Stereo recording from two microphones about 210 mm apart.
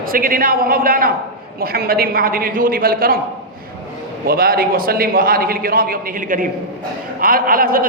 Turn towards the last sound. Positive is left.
turn(degrees=-45)  # may be behind; listen again after turning